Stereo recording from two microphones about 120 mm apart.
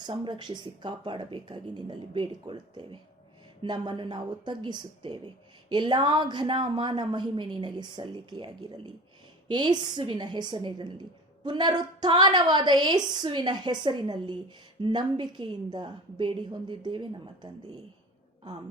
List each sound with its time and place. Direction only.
0.0 s a woman's voice: 40° right (ahead or behind)